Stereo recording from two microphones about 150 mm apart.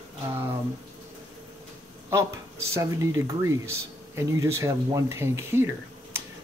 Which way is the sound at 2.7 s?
20° right (ahead or behind).